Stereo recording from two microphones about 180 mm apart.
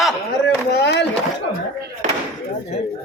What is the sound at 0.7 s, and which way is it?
Speech, 70° left (ahead or behind).